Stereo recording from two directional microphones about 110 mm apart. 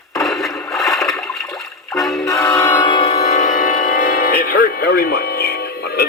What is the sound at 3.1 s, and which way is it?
Music, 85° left.